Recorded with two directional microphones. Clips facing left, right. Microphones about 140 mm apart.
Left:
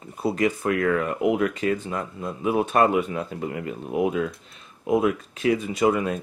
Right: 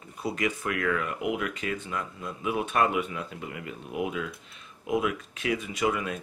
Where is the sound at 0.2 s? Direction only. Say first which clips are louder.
Left 7 dB; 35° left (ahead or behind).